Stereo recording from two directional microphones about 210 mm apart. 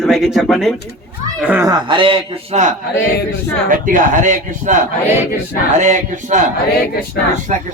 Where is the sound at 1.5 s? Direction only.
15° right (ahead or behind).